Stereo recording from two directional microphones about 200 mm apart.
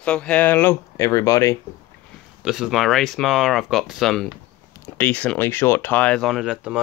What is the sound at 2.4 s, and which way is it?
Speech, 5° right (ahead or behind).